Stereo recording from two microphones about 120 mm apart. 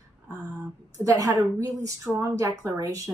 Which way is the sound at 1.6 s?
25° right (ahead or behind).